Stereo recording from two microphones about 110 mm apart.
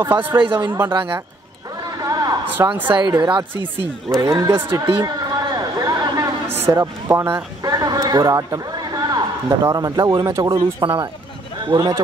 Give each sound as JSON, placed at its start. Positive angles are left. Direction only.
{"t": 0.0, "sound": "speech", "side_deg": -20}
{"t": 0.4, "sound": "speech", "side_deg": -45}
{"t": 0.7, "sound": "speech", "side_deg": -20}
{"t": 2.0, "sound": "a sound", "side_deg": -35}
{"t": 2.5, "sound": "speech", "side_deg": -15}
{"t": 2.9, "sound": "speech", "side_deg": -45}
{"t": 4.2, "sound": "speech", "side_deg": -25}
{"t": 5.0, "sound": "a sound", "side_deg": -35}
{"t": 6.6, "sound": "speech", "side_deg": -30}